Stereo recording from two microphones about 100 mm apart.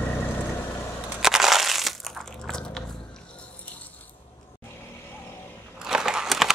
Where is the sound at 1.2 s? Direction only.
5° right (ahead or behind); by 3.9 s 15° left (ahead or behind).